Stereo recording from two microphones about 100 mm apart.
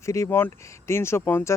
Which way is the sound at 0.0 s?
30° left (ahead or behind).